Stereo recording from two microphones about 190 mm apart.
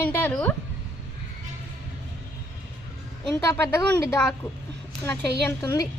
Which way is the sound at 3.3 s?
15° left (ahead or behind).